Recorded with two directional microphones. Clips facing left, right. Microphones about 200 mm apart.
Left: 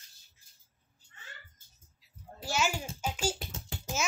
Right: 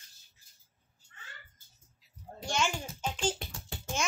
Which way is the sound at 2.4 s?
5° left (ahead or behind).